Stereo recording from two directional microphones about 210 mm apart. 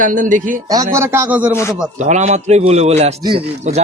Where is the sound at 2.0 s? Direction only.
35° right (ahead or behind).